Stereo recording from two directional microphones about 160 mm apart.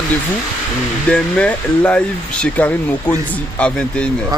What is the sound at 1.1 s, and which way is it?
Speech, 10° left (ahead or behind).